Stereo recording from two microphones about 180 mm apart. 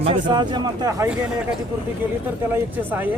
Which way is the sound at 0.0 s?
30° right (ahead or behind).